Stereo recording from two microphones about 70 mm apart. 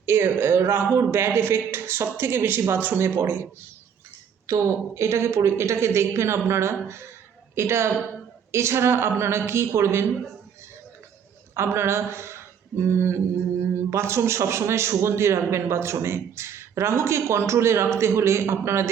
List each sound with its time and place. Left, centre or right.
0.0 s a man's voice: right
11.5 s a man's voice: right